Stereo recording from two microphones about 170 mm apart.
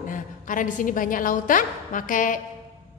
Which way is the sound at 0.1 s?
50° left (ahead or behind).